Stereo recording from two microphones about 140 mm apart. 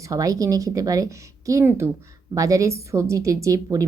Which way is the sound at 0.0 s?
25° right (ahead or behind).